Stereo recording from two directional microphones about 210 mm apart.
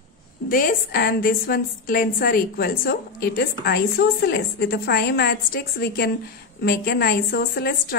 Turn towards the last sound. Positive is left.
turn(degrees=45)  # may be behind; listen again after turning